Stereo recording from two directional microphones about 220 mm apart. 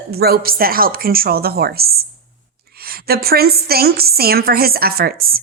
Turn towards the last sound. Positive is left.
turn(degrees=-45)  # may be behind; listen again after turning